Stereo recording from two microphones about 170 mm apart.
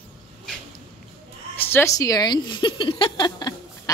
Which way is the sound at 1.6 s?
15° left (ahead or behind).